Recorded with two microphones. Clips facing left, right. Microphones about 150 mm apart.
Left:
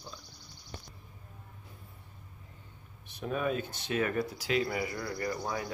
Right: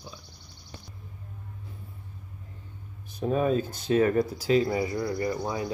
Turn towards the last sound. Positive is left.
turn(degrees=-20)  # may be behind; listen again after turning